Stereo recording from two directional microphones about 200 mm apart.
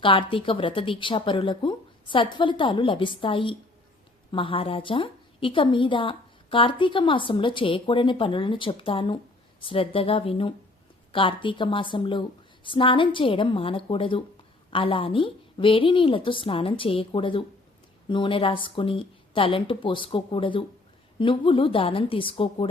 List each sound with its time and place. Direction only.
0.0 s a woman's voice: 25° left (ahead or behind)